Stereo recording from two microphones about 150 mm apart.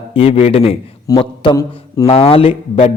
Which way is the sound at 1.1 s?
20° left (ahead or behind).